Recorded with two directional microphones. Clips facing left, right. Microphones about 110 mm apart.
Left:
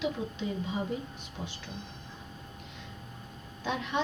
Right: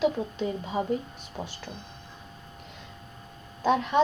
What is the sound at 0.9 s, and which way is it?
Speech, 50° right (ahead or behind).